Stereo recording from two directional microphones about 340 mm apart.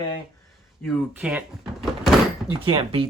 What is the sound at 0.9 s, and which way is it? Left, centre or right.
Speech, centre.